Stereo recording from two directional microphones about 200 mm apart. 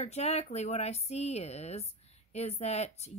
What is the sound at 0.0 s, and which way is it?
A woman's voice, 35° left (ahead or behind).